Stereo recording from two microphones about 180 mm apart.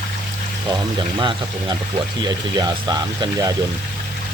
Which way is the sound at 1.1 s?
25° right (ahead or behind).